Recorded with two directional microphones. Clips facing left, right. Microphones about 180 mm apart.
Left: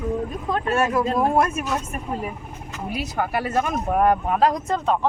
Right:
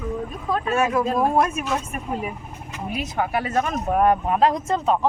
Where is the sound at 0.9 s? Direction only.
5° left (ahead or behind).